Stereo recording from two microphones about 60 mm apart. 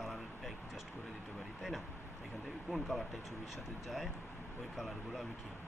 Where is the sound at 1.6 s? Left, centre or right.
Centre.